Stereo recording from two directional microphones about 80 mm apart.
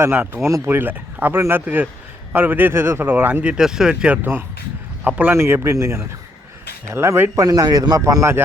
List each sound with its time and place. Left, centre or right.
0.4 s speech: right
3.4 s speech: centre
4.2 s speech: right
5.3 s speech: right
7.4 s a man's voice: right